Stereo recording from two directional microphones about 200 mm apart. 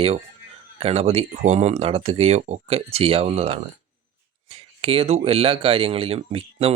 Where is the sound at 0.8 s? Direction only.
30° right (ahead or behind).